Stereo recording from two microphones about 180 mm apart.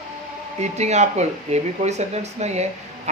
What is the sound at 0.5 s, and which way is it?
Speech, 40° right (ahead or behind).